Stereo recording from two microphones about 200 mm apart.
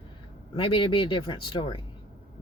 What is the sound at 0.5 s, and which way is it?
Speech, 25° left (ahead or behind).